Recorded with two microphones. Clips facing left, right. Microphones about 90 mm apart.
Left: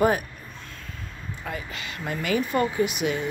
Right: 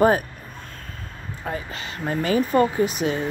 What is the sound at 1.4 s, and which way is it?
Speech, 35° right (ahead or behind).